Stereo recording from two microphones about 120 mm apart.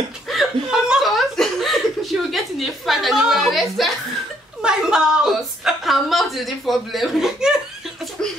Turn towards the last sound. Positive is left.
turn(degrees=-5)  # may be behind; listen again after turning